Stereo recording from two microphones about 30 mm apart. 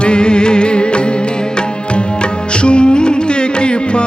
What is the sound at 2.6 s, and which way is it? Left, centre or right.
Music, left.